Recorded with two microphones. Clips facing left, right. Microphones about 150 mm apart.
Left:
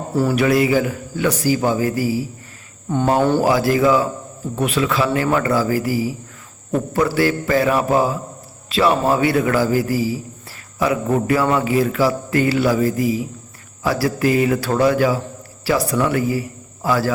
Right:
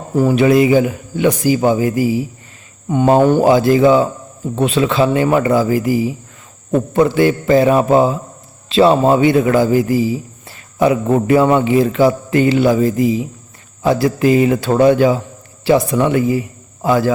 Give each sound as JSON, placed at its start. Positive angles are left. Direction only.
{"t": 0.1, "sound": "a man's voice", "side_deg": -20}